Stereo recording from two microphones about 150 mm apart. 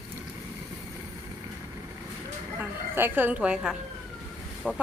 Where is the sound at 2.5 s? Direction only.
15° right (ahead or behind).